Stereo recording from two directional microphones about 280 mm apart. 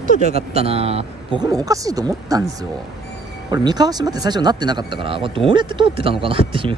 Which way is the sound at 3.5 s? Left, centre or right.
Centre.